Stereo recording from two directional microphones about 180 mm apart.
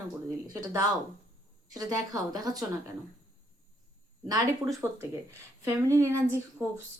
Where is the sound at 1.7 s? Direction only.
20° right (ahead or behind).